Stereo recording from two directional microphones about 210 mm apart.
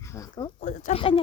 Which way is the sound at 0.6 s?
35° left (ahead or behind).